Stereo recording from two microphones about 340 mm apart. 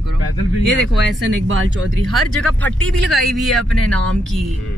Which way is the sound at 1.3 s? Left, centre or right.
Right.